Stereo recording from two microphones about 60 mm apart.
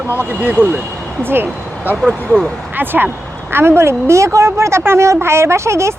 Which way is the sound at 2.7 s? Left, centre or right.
Right.